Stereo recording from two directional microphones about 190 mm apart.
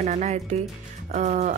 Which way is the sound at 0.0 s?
35° right (ahead or behind).